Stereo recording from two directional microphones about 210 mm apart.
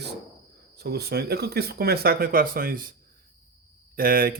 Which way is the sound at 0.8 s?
50° right (ahead or behind).